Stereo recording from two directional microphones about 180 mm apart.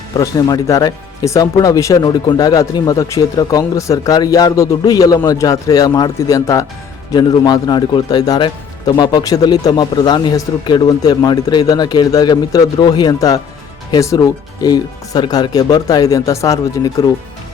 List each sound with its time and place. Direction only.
0.2 s speech: 20° left (ahead or behind)